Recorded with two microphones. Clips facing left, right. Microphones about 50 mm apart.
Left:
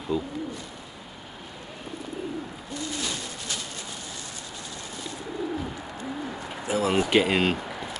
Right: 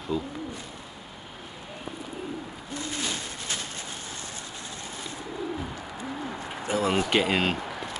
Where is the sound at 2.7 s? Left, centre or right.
Right.